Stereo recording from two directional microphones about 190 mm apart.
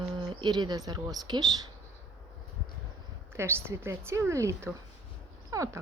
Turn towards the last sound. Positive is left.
turn(degrees=-15)  # may be behind; listen again after turning